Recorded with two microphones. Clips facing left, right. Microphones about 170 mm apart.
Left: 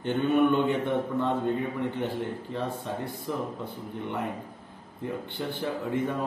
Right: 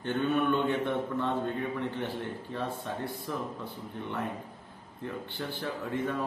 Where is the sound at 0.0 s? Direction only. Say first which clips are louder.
Left 5 dB; 15° left (ahead or behind).